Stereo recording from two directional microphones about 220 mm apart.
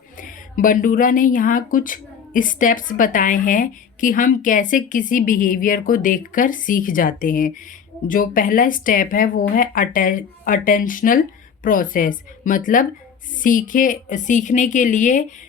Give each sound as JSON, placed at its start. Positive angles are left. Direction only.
{"t": 0.2, "sound": "speech", "side_deg": 35}